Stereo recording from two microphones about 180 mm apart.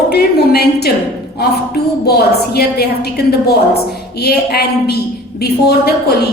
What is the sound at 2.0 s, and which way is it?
A woman's voice, 60° left (ahead or behind).